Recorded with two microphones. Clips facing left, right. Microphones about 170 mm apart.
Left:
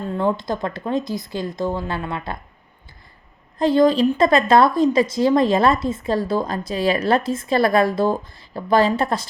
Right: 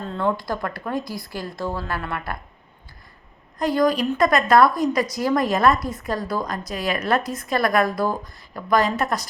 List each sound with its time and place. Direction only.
0.1 s a woman's voice: 20° left (ahead or behind)
3.6 s a woman's voice: 25° left (ahead or behind)